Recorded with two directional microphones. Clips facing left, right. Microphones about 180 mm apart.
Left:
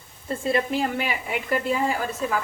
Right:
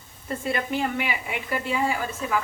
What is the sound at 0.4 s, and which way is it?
A woman's voice, 30° left (ahead or behind).